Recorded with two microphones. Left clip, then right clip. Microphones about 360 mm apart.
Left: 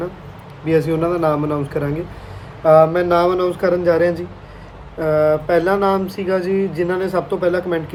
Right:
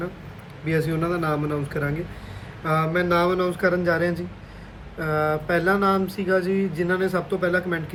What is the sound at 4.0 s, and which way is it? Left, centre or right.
Speech, centre.